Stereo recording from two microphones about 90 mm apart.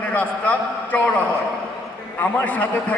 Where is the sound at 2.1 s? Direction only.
20° left (ahead or behind).